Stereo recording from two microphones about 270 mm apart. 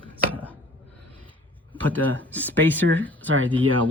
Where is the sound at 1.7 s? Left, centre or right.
Centre.